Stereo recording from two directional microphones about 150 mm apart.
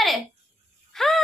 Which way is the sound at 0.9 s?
Centre (ahead or behind).